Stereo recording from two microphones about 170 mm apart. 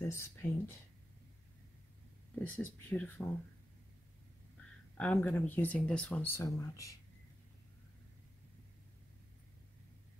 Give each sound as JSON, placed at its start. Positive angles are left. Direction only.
{"t": 0.1, "sound": "speech", "side_deg": 15}
{"t": 2.3, "sound": "speech", "side_deg": 10}
{"t": 4.6, "sound": "speech", "side_deg": 5}